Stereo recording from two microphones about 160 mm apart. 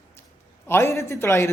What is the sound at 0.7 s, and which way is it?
Speech, 15° left (ahead or behind).